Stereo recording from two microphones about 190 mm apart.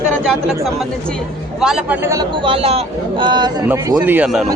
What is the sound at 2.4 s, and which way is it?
Speech, 30° right (ahead or behind).